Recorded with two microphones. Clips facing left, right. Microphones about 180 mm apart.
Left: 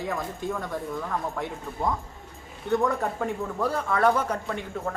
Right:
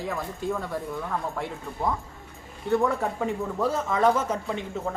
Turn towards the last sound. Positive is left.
turn(degrees=-5)  # may be behind; listen again after turning